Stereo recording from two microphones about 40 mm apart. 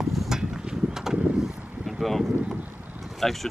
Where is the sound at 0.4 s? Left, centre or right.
Centre.